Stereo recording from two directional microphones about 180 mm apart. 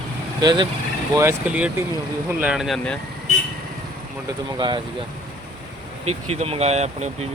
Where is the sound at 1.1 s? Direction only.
10° right (ahead or behind).